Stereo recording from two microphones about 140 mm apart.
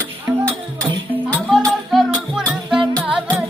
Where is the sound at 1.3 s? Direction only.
5° left (ahead or behind).